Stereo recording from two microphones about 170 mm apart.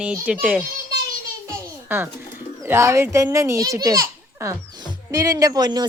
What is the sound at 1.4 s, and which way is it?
Music, 15° right (ahead or behind).